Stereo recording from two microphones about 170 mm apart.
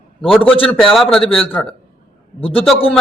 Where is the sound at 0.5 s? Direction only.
30° left (ahead or behind).